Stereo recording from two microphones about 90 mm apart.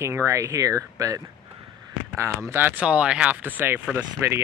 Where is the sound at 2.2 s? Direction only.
30° right (ahead or behind).